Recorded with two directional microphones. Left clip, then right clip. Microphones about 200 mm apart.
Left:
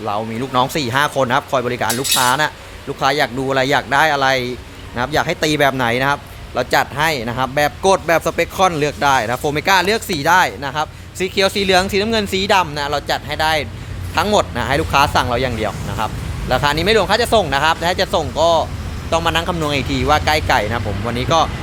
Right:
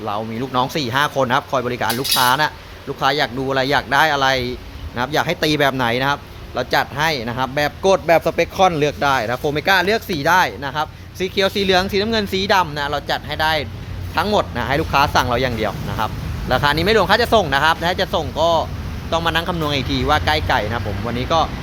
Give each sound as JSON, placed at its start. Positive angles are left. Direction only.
{"t": 0.0, "sound": "speech", "side_deg": 10}